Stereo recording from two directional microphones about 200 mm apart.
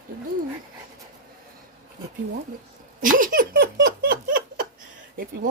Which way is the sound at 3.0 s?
45° right (ahead or behind).